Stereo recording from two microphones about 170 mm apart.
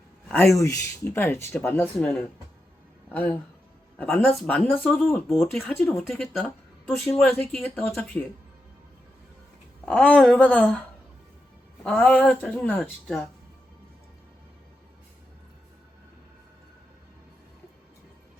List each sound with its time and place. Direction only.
0.3 s speech: centre (ahead or behind)
0.6 s speech: 15° left (ahead or behind)
3.1 s speech: 10° left (ahead or behind)
9.8 s speech: 5° left (ahead or behind)
11.8 s speech: 5° left (ahead or behind)